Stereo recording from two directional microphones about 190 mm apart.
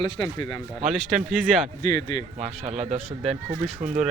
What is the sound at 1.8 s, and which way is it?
Speech, 20° left (ahead or behind).